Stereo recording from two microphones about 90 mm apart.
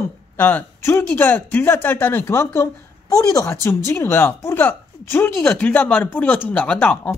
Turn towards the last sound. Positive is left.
turn(degrees=20)  # may be behind; listen again after turning